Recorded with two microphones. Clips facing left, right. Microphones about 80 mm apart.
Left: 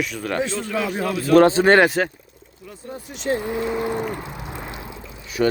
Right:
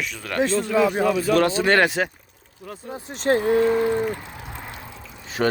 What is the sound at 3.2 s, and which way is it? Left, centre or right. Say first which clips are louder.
Speech: right 4 dB; right.